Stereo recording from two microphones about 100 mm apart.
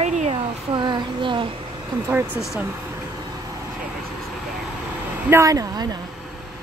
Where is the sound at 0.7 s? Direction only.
50° right (ahead or behind).